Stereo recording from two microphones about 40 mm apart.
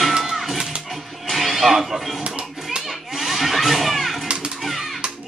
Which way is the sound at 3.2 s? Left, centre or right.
Centre.